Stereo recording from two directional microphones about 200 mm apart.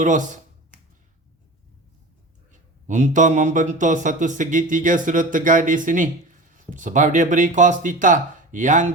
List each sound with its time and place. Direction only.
0.0 s speech: 40° right (ahead or behind)
2.5 s speech: 40° right (ahead or behind)